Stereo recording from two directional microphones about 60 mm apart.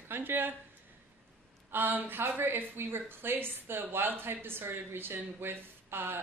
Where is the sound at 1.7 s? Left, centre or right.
Right.